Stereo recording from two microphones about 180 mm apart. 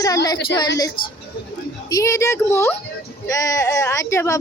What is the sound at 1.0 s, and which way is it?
Speech, 55° left (ahead or behind).